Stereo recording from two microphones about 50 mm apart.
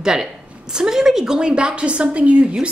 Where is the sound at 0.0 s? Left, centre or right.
Centre.